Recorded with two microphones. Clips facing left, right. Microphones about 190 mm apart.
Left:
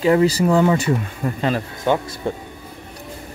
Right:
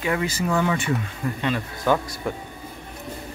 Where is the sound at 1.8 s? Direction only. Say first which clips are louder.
Left 2 dB; 20° left (ahead or behind).